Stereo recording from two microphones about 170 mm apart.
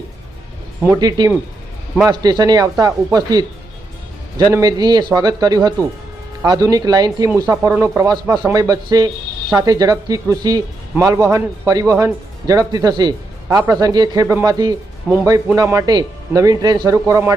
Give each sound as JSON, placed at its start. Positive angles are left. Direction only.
{"t": 0.9, "sound": "speech", "side_deg": -25}